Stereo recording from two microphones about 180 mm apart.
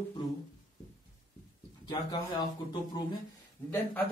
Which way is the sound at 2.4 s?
20° left (ahead or behind).